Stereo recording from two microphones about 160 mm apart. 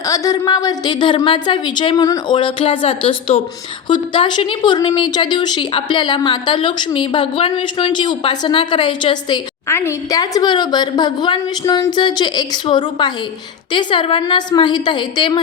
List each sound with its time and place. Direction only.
0.1 s speech: 20° left (ahead or behind)
9.6 s speech: 15° left (ahead or behind)